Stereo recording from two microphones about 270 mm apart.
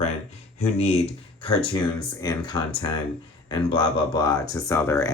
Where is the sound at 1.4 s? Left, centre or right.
Left.